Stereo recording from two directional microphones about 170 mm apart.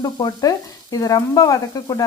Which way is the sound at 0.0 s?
20° left (ahead or behind).